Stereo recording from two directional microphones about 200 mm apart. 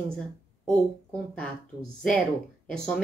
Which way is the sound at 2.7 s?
5° left (ahead or behind).